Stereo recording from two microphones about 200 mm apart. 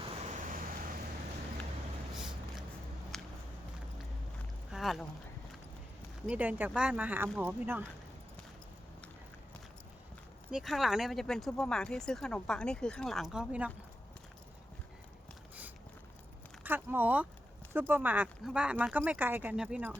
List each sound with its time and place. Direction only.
0.1 s vehicle: 40° right (ahead or behind)
2.1 s vehicle: centre (ahead or behind)
3.1 s walk: centre (ahead or behind)
4.7 s a sound: centre (ahead or behind)
6.2 s speech: 5° right (ahead or behind)
10.5 s speech: centre (ahead or behind)
16.6 s speech: 10° right (ahead or behind)